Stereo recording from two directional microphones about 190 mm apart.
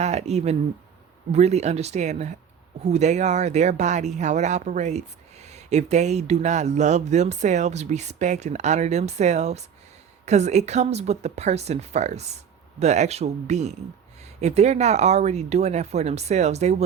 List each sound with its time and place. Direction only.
0.0 s speech: 35° right (ahead or behind)